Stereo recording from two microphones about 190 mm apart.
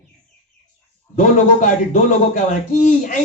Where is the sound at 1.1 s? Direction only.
40° left (ahead or behind).